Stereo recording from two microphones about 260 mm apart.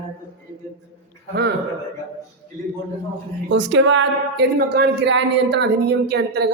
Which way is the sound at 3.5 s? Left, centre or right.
Right.